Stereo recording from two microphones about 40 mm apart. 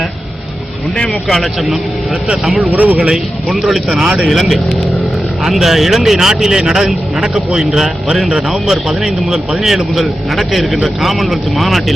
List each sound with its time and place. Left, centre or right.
0.9 s speech: left
1.3 s speech: centre
2.7 s speech: right
3.5 s speech: centre
4.3 s speech: centre